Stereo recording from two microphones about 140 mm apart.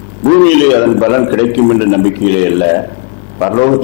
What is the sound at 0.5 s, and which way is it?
A man's voice, 10° left (ahead or behind).